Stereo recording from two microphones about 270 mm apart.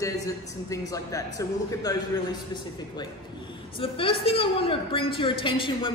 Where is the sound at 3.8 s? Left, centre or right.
Centre.